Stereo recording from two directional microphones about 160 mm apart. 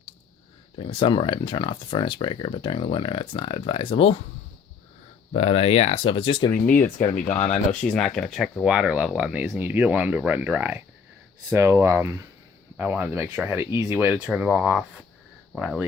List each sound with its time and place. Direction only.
0.8 s speech: 35° left (ahead or behind)
5.3 s speech: 40° left (ahead or behind)
7.0 s speech: 50° left (ahead or behind)
7.5 s speech: 5° left (ahead or behind); by 13.7 s 10° right (ahead or behind)
13.7 s speech: 35° left (ahead or behind)
13.9 s speech: 10° right (ahead or behind)